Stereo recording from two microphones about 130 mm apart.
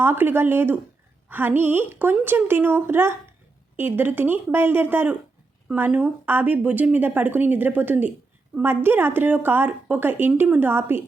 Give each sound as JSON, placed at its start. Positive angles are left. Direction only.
{"t": 0.0, "sound": "speech", "side_deg": -15}